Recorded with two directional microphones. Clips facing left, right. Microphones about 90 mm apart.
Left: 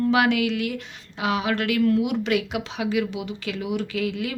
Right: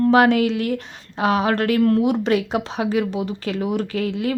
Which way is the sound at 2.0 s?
35° right (ahead or behind).